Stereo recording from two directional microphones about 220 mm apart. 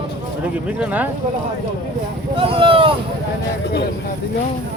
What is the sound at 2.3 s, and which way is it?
Speech, 25° right (ahead or behind).